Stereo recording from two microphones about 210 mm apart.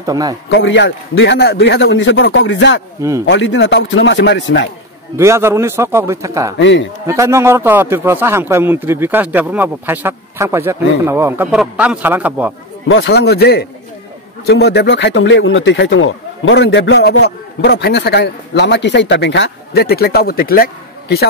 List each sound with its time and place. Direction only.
0.0 s speech: 15° right (ahead or behind)
0.5 s a man's voice: 60° left (ahead or behind)
5.1 s speech: 15° right (ahead or behind)
6.6 s a man's voice: 60° left (ahead or behind)
7.1 s speech: 15° right (ahead or behind)
12.8 s speech: 60° left (ahead or behind)